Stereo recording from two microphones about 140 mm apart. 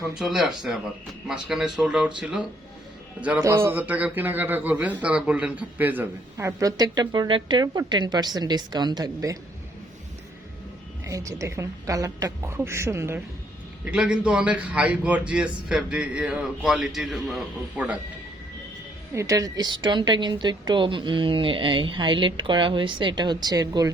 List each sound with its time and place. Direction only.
0.2 s speech: centre (ahead or behind)
3.3 s a man's voice: 20° right (ahead or behind)
11.0 s a man's voice: 25° right (ahead or behind)
13.8 s a man's voice: 5° right (ahead or behind)
19.1 s a woman's voice: 20° right (ahead or behind)